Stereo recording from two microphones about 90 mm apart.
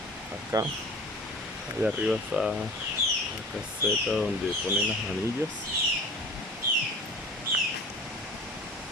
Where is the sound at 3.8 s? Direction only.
5° left (ahead or behind).